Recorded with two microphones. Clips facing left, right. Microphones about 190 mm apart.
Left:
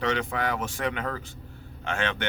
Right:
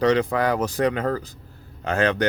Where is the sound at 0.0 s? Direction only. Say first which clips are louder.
Right 8 dB; 35° right (ahead or behind).